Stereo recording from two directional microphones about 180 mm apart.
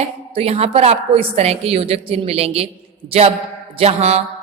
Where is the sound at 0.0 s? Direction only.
35° right (ahead or behind).